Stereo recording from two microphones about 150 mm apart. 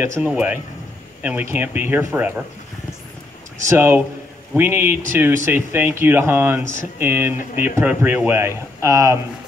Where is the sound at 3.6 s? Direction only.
15° right (ahead or behind).